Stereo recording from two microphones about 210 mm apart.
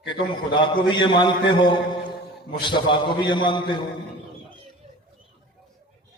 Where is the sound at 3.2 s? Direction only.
20° left (ahead or behind).